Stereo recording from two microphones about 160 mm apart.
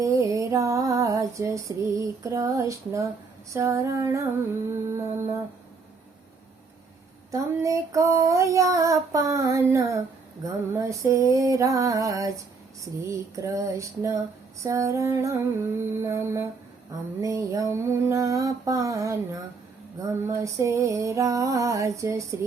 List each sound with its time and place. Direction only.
0.0 s female singing: 20° right (ahead or behind)
4.7 s music: 15° right (ahead or behind)
7.3 s female singing: 20° right (ahead or behind)
14.6 s music: 20° right (ahead or behind)
17.2 s female singing: 20° right (ahead or behind)